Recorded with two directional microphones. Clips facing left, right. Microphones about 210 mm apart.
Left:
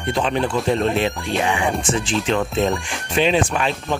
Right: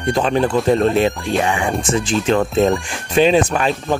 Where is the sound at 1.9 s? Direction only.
45° right (ahead or behind).